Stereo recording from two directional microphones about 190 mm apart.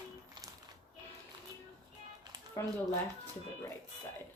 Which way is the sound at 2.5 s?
15° left (ahead or behind).